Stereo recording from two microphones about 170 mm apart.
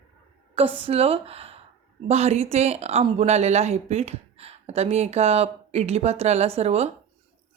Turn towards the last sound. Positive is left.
turn(degrees=-40)  # may be behind; listen again after turning